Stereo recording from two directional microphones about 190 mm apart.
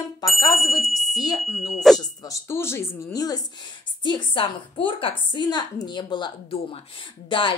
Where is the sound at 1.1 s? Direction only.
20° left (ahead or behind).